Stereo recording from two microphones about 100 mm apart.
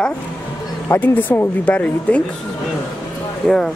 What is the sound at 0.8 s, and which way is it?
Speech, 20° left (ahead or behind).